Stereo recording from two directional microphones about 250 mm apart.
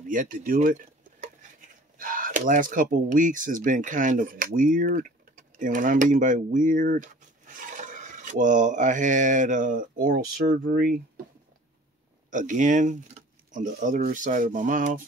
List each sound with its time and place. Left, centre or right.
0.1 s speech: right
12.3 s speech: right